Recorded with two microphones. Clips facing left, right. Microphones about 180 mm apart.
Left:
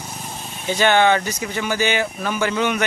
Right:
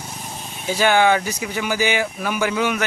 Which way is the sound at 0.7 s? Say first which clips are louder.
Even; 5° right (ahead or behind).